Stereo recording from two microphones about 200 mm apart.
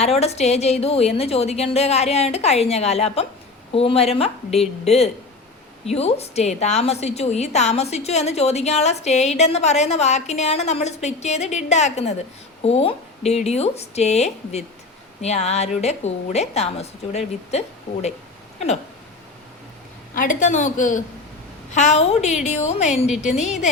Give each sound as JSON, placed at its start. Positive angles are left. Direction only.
{"t": 0.0, "sound": "a woman's voice", "side_deg": 30}
{"t": 20.1, "sound": "a woman's voice", "side_deg": 40}